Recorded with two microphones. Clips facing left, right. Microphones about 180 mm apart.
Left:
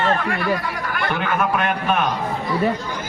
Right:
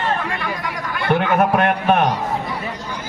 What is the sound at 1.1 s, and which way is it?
A man's voice, 60° right (ahead or behind).